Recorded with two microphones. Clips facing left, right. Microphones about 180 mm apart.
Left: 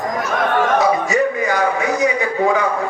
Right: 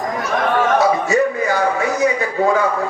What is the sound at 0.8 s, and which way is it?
A man's voice, 15° left (ahead or behind).